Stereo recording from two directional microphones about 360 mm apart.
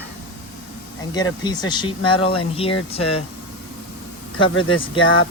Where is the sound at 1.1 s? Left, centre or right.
Centre.